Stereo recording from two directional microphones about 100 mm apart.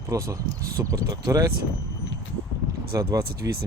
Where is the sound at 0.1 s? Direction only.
30° right (ahead or behind).